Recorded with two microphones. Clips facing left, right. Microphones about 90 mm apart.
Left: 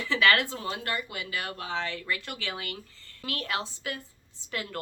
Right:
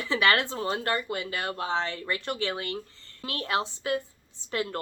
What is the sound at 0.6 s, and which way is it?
A woman's voice, 35° right (ahead or behind).